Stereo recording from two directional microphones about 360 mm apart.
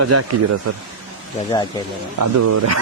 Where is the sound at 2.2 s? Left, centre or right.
Right.